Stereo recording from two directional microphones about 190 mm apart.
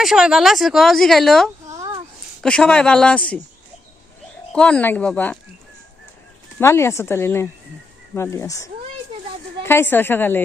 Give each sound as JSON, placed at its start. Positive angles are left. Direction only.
{"t": 0.0, "sound": "speech", "side_deg": -5}
{"t": 1.6, "sound": "a sound", "side_deg": -20}
{"t": 2.4, "sound": "speech", "side_deg": 5}
{"t": 4.5, "sound": "speech", "side_deg": 5}
{"t": 6.6, "sound": "speech", "side_deg": 15}